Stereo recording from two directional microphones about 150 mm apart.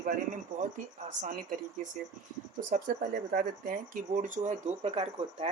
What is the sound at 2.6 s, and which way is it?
Speech, 65° right (ahead or behind).